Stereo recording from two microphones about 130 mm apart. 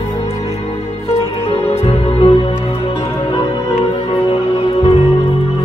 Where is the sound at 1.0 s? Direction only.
50° left (ahead or behind).